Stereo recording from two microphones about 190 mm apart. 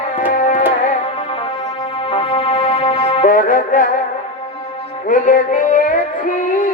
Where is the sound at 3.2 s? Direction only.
45° left (ahead or behind).